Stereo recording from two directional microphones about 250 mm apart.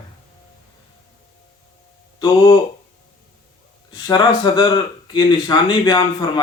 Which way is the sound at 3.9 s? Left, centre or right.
Centre.